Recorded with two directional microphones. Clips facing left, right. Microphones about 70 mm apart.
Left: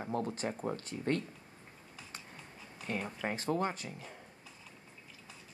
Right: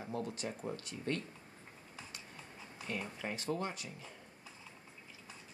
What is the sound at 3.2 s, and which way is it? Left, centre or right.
Speech, left.